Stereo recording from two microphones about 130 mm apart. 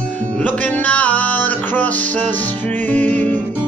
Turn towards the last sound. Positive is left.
turn(degrees=15)  # may be behind; listen again after turning